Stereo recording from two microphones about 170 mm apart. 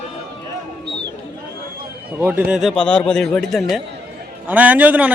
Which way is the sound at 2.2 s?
10° right (ahead or behind).